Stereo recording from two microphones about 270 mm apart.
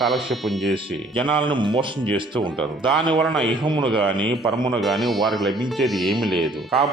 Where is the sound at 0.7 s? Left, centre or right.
Centre.